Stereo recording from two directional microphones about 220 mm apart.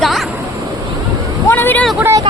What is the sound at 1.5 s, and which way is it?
Speech, 10° left (ahead or behind).